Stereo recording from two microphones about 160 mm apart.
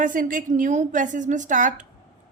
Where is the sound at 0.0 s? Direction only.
55° right (ahead or behind).